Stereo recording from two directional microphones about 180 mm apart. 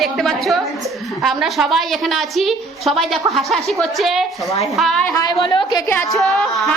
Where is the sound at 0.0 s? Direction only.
Centre (ahead or behind).